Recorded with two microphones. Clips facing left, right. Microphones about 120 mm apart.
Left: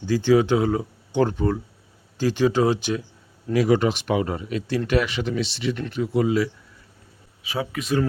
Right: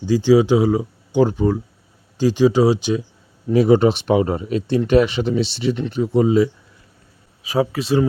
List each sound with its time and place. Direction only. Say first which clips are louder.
0.0 s speech: right 4 dB; 15° right (ahead or behind)
3.5 s speech: right 6 dB; 30° right (ahead or behind)
7.4 s speech: right 8 dB; 40° right (ahead or behind)